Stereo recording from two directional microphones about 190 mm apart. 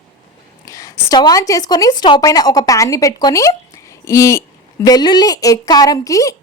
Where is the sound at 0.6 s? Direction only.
15° left (ahead or behind).